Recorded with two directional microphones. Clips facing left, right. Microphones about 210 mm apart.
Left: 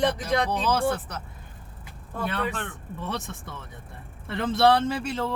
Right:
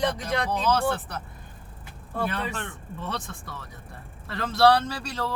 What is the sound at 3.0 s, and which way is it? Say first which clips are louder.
Speech: left 1 dB; 15° left (ahead or behind).